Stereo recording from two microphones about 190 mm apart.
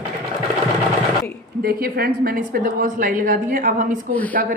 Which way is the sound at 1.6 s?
55° right (ahead or behind).